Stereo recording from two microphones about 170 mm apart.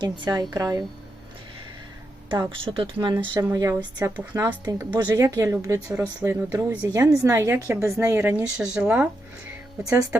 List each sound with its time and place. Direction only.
0.0 s speech: 20° right (ahead or behind)
2.3 s speech: 30° right (ahead or behind)
4.2 s speech: 10° right (ahead or behind)
4.4 s speech: 25° right (ahead or behind); by 9.0 s 5° right (ahead or behind)